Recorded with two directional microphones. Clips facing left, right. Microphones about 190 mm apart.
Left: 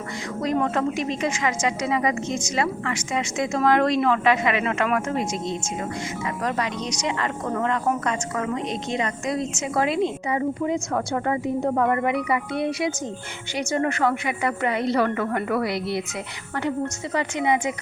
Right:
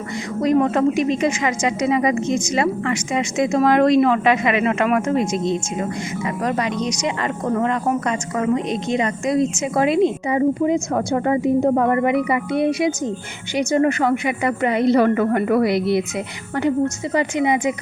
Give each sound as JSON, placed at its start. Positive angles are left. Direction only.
{"t": 0.4, "sound": "speech", "side_deg": -15}
{"t": 11.7, "sound": "a woman's voice", "side_deg": -30}
{"t": 17.2, "sound": "speech", "side_deg": -15}